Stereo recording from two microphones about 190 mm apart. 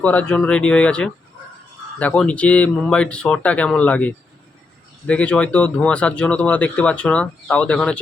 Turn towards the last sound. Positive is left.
turn(degrees=5)  # may be behind; listen again after turning